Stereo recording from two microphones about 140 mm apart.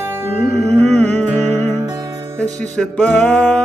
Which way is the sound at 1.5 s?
55° right (ahead or behind).